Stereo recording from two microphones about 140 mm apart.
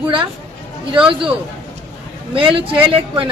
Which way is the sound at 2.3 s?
40° right (ahead or behind).